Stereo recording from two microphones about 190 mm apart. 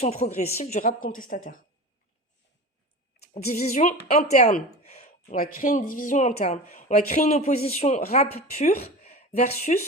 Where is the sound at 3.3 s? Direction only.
35° left (ahead or behind).